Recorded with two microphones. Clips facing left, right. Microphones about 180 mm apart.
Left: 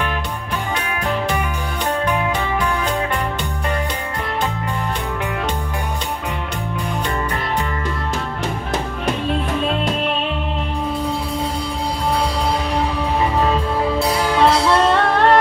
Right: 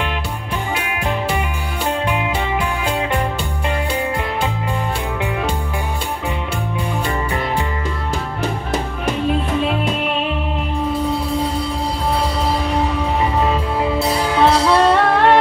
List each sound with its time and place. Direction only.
13.9 s music: centre (ahead or behind)